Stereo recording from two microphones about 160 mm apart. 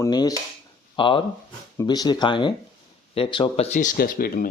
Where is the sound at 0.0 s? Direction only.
25° left (ahead or behind).